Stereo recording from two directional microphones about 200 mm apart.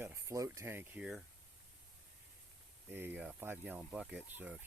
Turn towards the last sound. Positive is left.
turn(degrees=-10)  # may be behind; listen again after turning